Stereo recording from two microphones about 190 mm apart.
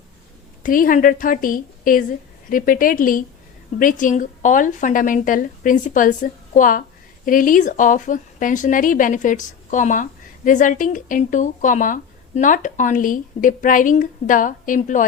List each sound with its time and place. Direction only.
0.6 s speech: 45° left (ahead or behind)